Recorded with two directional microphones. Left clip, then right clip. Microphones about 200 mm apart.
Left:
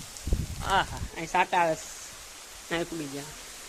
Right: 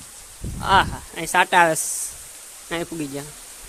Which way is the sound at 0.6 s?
20° right (ahead or behind).